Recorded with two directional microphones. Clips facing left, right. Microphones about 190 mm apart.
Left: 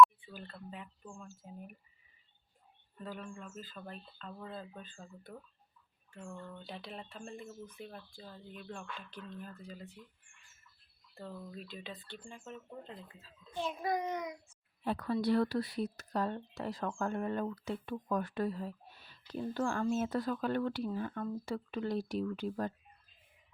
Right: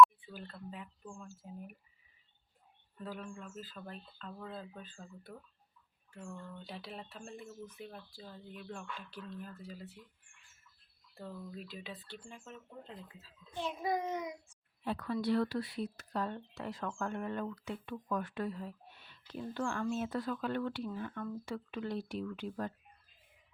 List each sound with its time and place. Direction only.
0.0 s speech: 5° right (ahead or behind)
3.0 s speech: 5° right (ahead or behind)
6.7 s speech: 5° right (ahead or behind)
11.1 s speech: centre (ahead or behind)
14.8 s speech: 35° left (ahead or behind)